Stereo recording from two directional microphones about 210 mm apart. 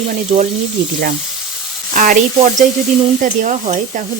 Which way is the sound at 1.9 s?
40° right (ahead or behind).